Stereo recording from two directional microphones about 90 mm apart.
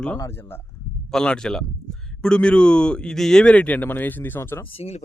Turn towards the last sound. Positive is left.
turn(degrees=25)  # may be behind; listen again after turning